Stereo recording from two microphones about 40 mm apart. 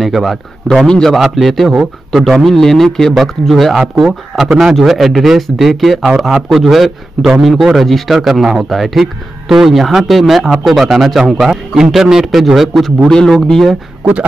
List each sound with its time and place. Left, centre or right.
0.0 s a man's voice: centre
0.8 s a man's voice: centre
1.2 s a man's voice: centre
3.7 s a man's voice: centre
13.1 s a man's voice: centre